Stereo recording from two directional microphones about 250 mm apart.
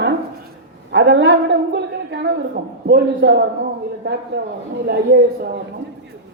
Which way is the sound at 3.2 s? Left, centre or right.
Right.